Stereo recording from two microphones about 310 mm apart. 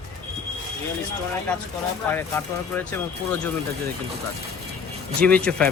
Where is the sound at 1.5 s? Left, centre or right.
Centre.